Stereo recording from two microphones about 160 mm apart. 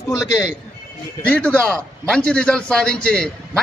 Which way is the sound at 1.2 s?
10° left (ahead or behind).